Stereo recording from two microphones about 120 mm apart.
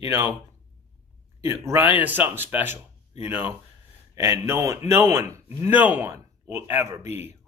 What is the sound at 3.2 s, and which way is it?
A man's voice, 15° right (ahead or behind).